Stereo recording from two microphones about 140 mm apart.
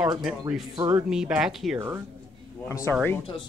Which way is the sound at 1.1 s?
5° right (ahead or behind).